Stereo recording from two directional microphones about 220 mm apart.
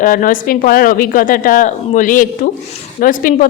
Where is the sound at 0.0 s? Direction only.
40° left (ahead or behind).